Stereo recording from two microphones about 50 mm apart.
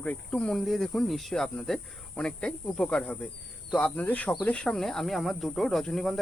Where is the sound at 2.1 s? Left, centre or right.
Centre.